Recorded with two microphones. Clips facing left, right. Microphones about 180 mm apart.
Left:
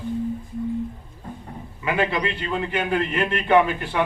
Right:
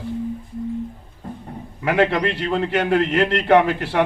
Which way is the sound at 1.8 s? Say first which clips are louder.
Right 5 dB; 75° right (ahead or behind).